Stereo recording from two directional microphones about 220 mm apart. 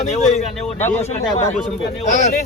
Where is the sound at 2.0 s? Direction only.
35° left (ahead or behind).